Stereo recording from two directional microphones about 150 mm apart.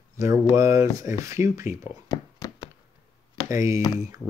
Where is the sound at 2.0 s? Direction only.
25° left (ahead or behind).